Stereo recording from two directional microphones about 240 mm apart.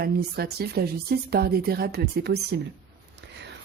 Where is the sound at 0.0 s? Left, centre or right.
Right.